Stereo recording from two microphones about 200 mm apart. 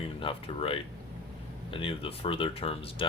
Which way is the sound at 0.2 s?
25° left (ahead or behind).